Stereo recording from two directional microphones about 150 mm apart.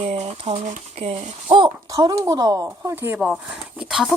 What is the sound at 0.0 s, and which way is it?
Speech, 45° right (ahead or behind).